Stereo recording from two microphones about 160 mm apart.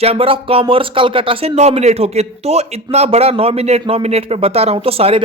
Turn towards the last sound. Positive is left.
turn(degrees=-35)  # may be behind; listen again after turning